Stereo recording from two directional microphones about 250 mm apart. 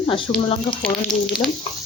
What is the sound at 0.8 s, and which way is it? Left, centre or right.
Speech, centre.